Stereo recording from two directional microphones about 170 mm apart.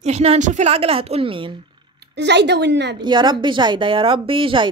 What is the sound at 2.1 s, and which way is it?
Speech, 85° right.